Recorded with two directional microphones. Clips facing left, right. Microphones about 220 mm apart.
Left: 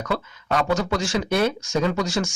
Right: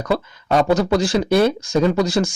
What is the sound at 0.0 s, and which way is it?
Speech, 35° right (ahead or behind).